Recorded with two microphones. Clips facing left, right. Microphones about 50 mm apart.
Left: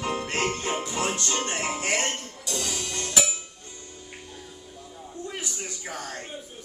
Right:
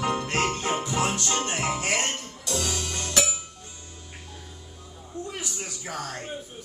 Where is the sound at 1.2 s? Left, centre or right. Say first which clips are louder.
Right 1 dB; centre.